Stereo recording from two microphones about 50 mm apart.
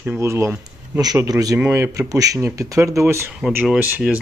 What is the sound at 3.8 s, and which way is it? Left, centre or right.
Speech, right.